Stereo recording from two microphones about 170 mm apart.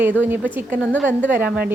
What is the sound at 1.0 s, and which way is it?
Speech, 10° right (ahead or behind).